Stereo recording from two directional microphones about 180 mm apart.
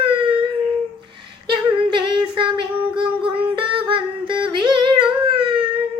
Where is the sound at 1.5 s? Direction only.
25° right (ahead or behind).